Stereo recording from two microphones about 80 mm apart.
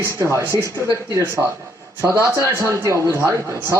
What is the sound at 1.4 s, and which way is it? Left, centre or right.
Speech, centre.